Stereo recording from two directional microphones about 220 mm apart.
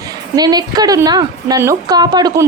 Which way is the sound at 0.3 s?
20° right (ahead or behind).